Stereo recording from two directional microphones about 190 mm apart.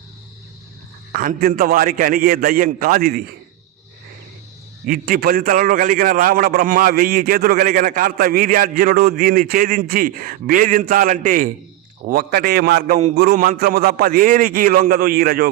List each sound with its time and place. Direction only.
1.1 s a man's voice: 45° right (ahead or behind)
4.9 s a man's voice: 50° right (ahead or behind)